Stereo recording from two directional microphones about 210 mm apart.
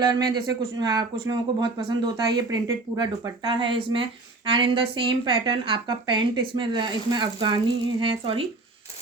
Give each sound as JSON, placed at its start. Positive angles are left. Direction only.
{"t": 0.0, "sound": "a woman's voice", "side_deg": -20}